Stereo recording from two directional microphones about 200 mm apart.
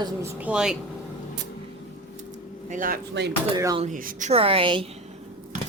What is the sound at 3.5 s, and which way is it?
Speech, 20° right (ahead or behind).